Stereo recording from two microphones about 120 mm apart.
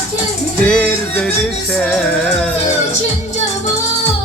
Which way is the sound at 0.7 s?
10° left (ahead or behind).